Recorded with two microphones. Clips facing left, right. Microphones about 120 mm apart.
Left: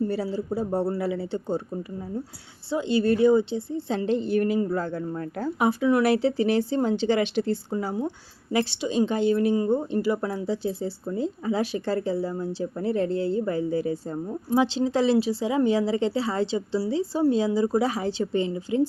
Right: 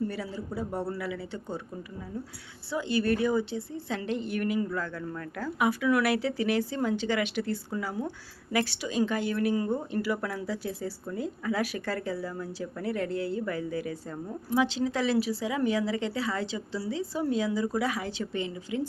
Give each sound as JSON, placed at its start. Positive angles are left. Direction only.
{"t": 0.1, "sound": "speech", "side_deg": 30}
{"t": 2.6, "sound": "speech", "side_deg": 25}